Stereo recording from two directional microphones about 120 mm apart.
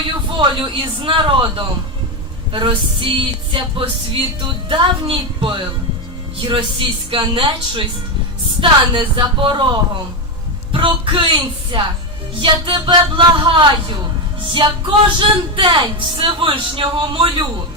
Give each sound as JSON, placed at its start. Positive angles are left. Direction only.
{"t": 0.3, "sound": "speech", "side_deg": -45}